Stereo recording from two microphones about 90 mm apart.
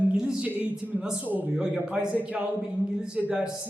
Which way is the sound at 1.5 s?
5° right (ahead or behind).